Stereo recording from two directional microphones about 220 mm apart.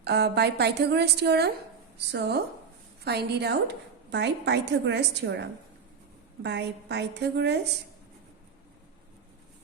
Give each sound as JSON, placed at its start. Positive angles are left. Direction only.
{"t": 0.0, "sound": "a woman's voice", "side_deg": -50}